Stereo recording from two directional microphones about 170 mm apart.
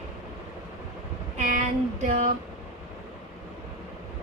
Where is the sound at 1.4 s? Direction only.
45° right (ahead or behind).